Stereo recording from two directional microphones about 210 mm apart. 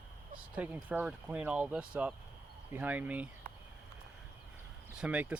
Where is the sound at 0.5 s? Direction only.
5° right (ahead or behind).